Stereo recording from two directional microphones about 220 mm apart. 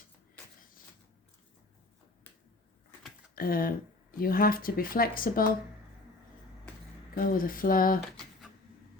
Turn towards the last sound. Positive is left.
turn(degrees=40)  # may be behind; listen again after turning